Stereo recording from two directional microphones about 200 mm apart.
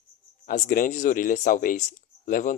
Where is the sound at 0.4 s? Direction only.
45° left (ahead or behind).